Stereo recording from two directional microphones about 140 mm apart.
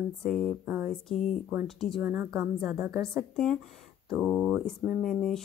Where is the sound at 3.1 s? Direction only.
5° left (ahead or behind).